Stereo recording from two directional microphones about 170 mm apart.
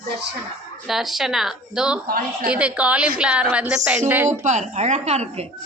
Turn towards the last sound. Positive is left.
turn(degrees=-40)  # may be behind; listen again after turning